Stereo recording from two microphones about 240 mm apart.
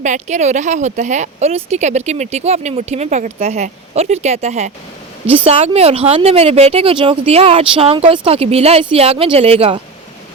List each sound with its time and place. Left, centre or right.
0.0 s speech: right